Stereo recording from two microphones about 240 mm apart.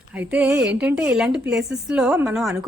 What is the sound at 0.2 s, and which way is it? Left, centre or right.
Speech, centre.